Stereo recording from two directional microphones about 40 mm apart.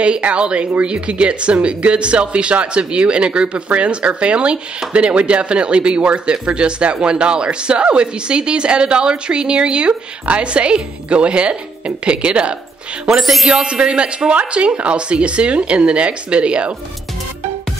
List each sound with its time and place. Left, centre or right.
0.0 s speech: right
13.2 s speech: centre
13.5 s speech: right